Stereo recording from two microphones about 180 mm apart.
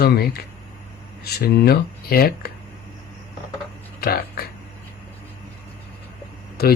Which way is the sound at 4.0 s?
60° left (ahead or behind).